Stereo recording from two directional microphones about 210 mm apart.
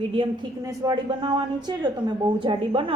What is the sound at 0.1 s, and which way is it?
A woman's voice, 20° right (ahead or behind).